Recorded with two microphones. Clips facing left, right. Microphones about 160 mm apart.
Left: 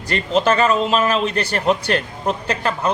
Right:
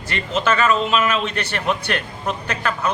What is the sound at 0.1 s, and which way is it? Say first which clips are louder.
A man's voice: left 4 dB; 35° left (ahead or behind).